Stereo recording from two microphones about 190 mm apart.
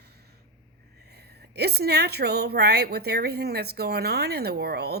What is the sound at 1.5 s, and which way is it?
Speech, 60° right (ahead or behind).